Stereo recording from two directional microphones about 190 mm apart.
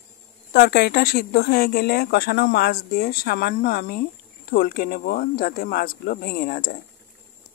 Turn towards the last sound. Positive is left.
turn(degrees=55)  # may be behind; listen again after turning